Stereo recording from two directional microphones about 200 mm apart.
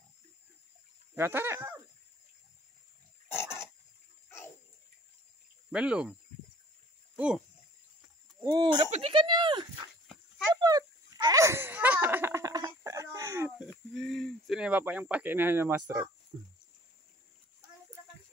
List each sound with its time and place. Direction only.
1.1 s speech: 10° right (ahead or behind)
3.3 s pig: 10° left (ahead or behind)
5.7 s speech: 5° right (ahead or behind)
7.2 s speech: 5° right (ahead or behind)
8.4 s speech: 15° right (ahead or behind)
10.5 s a sound: 20° right (ahead or behind)
13.7 s speech: centre (ahead or behind)